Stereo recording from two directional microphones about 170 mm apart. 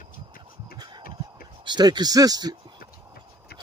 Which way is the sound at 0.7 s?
25° right (ahead or behind).